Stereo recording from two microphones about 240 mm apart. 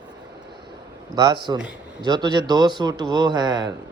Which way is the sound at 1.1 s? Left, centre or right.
Centre.